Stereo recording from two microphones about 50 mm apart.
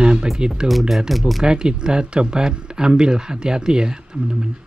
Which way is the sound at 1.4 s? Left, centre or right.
Centre.